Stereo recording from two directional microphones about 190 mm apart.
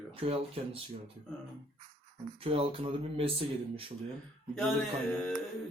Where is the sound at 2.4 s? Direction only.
30° right (ahead or behind).